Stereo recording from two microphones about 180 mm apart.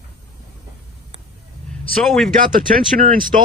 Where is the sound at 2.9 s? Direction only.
50° right (ahead or behind).